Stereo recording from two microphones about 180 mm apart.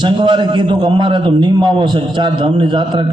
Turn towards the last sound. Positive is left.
turn(degrees=-25)  # may be behind; listen again after turning